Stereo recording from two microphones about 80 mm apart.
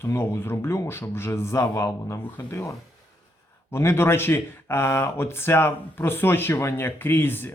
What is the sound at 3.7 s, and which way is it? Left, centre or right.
Speech, left.